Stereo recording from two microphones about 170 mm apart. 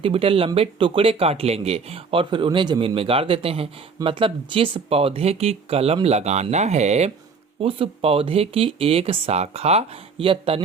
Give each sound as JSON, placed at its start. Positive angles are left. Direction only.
{"t": 0.0, "sound": "speech", "side_deg": -35}